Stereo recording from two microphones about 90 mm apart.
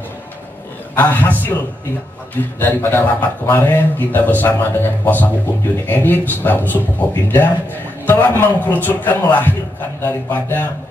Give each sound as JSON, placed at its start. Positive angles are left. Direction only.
{"t": 0.9, "sound": "speech", "side_deg": 20}
{"t": 2.6, "sound": "speech", "side_deg": 25}